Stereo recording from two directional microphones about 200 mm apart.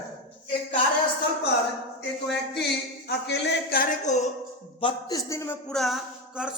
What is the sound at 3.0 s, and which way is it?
A man's voice, 60° left (ahead or behind).